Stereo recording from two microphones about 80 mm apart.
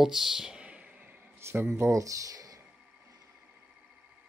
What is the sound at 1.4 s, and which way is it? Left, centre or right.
Speech, right.